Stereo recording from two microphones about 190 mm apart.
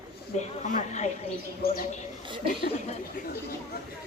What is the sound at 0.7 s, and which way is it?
Speech, 40° left (ahead or behind).